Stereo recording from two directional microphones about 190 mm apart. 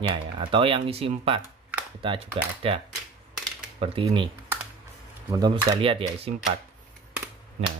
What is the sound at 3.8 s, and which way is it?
Speech, 30° right (ahead or behind).